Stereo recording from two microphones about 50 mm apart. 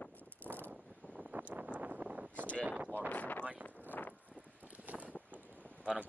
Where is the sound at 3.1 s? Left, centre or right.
Left.